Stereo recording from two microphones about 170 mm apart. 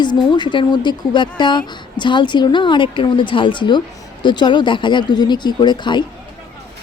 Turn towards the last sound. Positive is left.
turn(degrees=25)  # may be behind; listen again after turning